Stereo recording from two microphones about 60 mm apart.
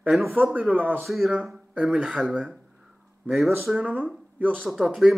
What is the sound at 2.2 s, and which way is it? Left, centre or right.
Speech, centre.